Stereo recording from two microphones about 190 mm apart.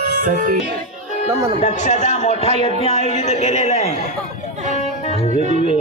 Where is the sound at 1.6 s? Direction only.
40° left (ahead or behind).